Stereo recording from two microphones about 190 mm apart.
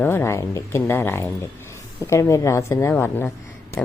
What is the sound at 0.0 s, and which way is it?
A woman's voice, 10° left (ahead or behind).